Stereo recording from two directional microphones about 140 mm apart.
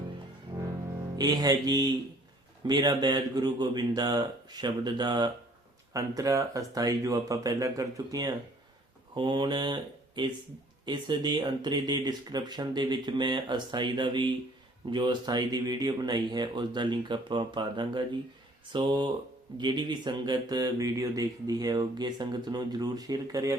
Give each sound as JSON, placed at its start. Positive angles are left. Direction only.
{"t": 1.1, "sound": "speech", "side_deg": -30}